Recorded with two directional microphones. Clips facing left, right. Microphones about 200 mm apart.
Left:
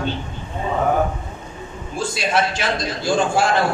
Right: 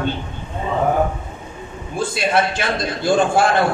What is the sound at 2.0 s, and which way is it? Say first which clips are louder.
A man's voice: right 2 dB; 55° right (ahead or behind).